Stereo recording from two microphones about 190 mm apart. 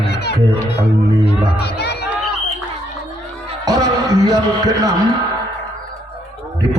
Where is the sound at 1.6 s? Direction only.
60° left (ahead or behind).